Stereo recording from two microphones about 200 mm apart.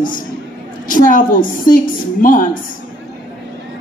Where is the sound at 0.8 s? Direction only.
45° left (ahead or behind).